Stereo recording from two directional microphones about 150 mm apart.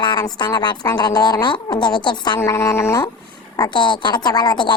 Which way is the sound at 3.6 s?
30° left (ahead or behind).